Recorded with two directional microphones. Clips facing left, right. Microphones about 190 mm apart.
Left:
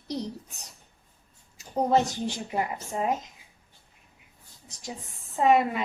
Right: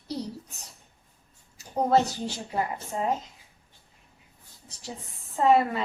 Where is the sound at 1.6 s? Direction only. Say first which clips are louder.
Right 1 dB; 15° left (ahead or behind).